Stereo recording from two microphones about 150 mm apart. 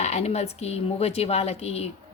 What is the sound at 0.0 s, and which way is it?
Speech, 45° left (ahead or behind).